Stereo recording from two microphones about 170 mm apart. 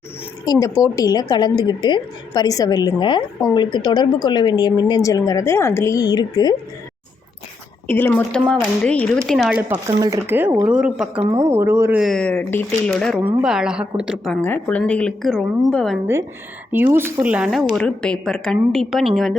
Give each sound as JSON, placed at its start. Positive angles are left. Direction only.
{"t": 0.4, "sound": "a woman's voice", "side_deg": 20}
{"t": 7.9, "sound": "speech", "side_deg": 10}
{"t": 9.6, "sound": "speech", "side_deg": -10}
{"t": 11.2, "sound": "speech", "side_deg": -30}
{"t": 11.4, "sound": "speech", "side_deg": -15}
{"t": 14.4, "sound": "speech", "side_deg": 10}
{"t": 16.7, "sound": "speech", "side_deg": -10}